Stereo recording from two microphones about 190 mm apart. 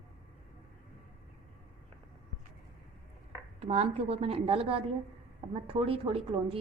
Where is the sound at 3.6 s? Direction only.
35° right (ahead or behind).